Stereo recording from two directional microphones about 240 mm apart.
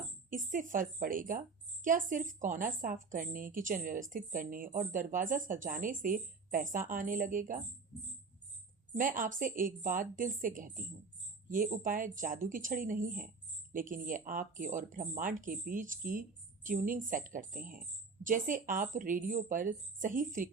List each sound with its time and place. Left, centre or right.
0.3 s a woman's voice: right
9.0 s a woman's voice: right